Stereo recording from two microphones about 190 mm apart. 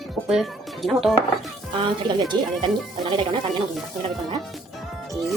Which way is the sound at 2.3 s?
25° right (ahead or behind).